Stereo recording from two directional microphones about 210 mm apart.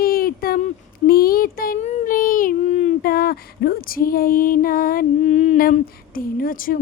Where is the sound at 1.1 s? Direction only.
45° left (ahead or behind).